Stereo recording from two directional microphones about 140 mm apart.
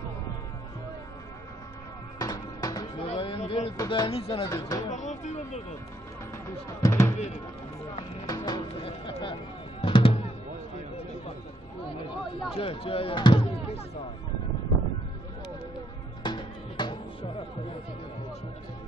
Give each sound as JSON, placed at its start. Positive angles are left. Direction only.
{"t": 2.1, "sound": "music", "side_deg": 25}
{"t": 3.1, "sound": "a sound", "side_deg": 40}
{"t": 3.7, "sound": "speech", "side_deg": 25}
{"t": 4.1, "sound": "speech", "side_deg": 40}
{"t": 4.9, "sound": "speech", "side_deg": 60}
{"t": 6.3, "sound": "speech", "side_deg": 20}
{"t": 8.3, "sound": "speech", "side_deg": 30}
{"t": 9.2, "sound": "music", "side_deg": 35}
{"t": 12.5, "sound": "speech", "side_deg": 40}
{"t": 16.2, "sound": "music", "side_deg": 35}